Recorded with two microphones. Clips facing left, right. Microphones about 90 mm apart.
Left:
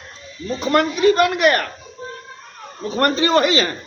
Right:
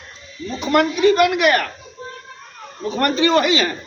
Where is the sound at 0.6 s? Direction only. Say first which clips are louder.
Right 1 dB; 40° left (ahead or behind).